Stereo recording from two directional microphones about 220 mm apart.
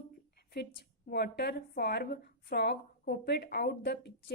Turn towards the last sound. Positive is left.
turn(degrees=50)  # may be behind; listen again after turning